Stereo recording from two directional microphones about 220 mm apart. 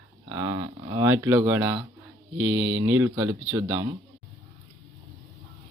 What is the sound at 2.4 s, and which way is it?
Speech, 55° right (ahead or behind).